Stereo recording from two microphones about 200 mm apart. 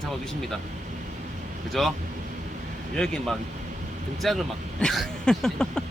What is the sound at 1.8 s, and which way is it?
Speech, centre (ahead or behind).